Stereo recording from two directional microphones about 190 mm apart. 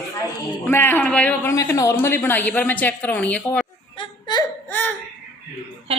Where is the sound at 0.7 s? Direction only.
10° left (ahead or behind).